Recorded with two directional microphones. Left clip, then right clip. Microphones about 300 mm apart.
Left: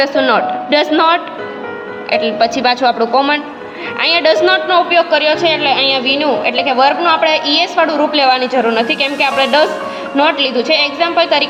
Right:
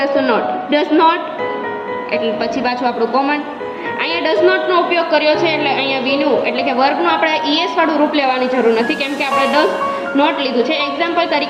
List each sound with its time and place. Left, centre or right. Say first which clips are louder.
0.0 s a man's voice: left 3 dB; left